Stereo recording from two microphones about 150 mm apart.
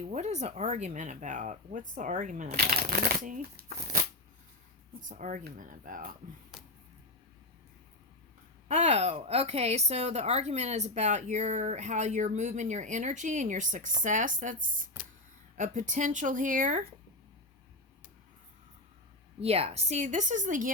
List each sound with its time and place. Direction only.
0.0 s speech: 50° right (ahead or behind); by 3.8 s 85° right
4.9 s speech: 60° right (ahead or behind)
8.6 s a woman's voice: 45° right (ahead or behind)
19.4 s a woman's voice: 40° right (ahead or behind); by 20.7 s 60° right (ahead or behind)